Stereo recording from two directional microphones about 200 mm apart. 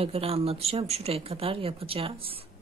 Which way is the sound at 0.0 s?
30° right (ahead or behind).